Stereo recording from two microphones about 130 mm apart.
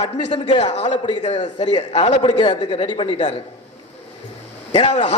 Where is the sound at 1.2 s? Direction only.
60° left (ahead or behind).